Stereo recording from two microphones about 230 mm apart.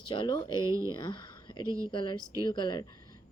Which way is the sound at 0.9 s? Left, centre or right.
Centre.